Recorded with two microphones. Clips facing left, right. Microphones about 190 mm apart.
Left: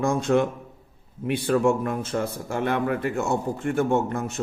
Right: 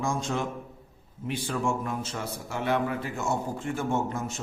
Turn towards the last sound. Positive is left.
turn(degrees=60)  # may be behind; listen again after turning